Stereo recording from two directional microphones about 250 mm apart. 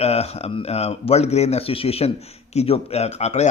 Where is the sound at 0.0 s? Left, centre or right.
Left.